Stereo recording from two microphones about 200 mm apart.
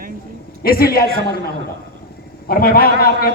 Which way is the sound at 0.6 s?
50° left (ahead or behind).